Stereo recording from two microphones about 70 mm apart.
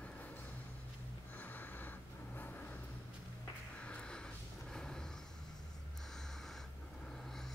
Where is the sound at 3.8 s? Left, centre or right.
Centre.